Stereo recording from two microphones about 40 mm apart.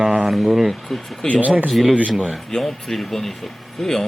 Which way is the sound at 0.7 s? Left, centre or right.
Centre.